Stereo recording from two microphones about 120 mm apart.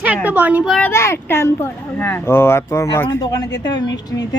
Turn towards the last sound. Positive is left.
turn(degrees=35)  # may be behind; listen again after turning